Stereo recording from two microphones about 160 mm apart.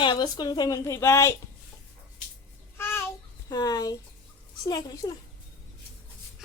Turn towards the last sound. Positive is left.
turn(degrees=25)  # may be behind; listen again after turning